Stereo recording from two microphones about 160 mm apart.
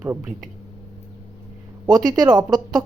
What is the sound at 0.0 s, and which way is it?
Speech, 10° right (ahead or behind).